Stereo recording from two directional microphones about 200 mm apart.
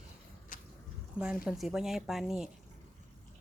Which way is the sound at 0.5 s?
40° left (ahead or behind).